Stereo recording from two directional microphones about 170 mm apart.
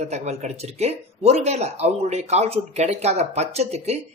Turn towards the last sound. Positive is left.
turn(degrees=-40)  # may be behind; listen again after turning